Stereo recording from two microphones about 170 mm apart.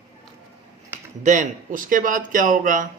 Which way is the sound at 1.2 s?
45° right (ahead or behind).